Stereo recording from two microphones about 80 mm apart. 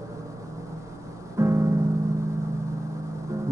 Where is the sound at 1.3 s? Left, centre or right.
Right.